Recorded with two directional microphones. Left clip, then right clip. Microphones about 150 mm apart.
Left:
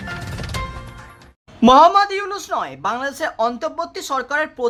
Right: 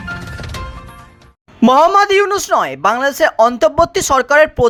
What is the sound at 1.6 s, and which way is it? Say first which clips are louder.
A woman's voice: right 1 dB; 45° right (ahead or behind).